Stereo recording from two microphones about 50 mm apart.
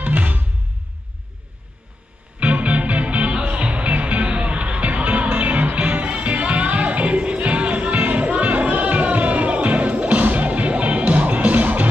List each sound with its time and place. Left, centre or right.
0.0 s music: right
2.4 s music: right